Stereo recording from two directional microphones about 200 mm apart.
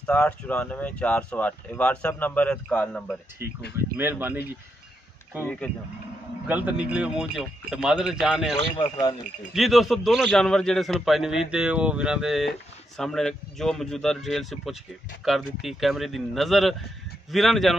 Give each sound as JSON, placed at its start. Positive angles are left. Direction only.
{"t": 0.0, "sound": "speech", "side_deg": 10}
{"t": 3.7, "sound": "speech", "side_deg": -10}
{"t": 6.4, "sound": "a man's voice", "side_deg": -5}
{"t": 8.7, "sound": "speech", "side_deg": 20}
{"t": 9.5, "sound": "a man's voice", "side_deg": 0}